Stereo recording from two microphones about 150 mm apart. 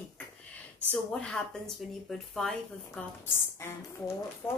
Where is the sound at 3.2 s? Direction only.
15° left (ahead or behind).